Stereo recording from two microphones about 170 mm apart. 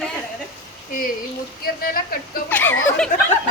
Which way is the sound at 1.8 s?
60° left (ahead or behind).